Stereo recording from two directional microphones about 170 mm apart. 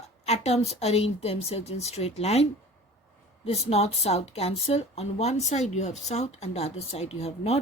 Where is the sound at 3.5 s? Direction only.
35° left (ahead or behind).